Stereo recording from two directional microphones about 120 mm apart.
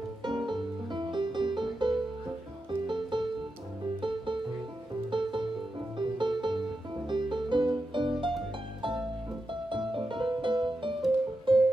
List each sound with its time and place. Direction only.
0.2 s music: 40° right (ahead or behind)
9.5 s music: 40° right (ahead or behind)